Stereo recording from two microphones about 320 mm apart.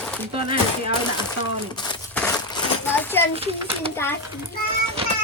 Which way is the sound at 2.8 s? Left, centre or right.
Centre.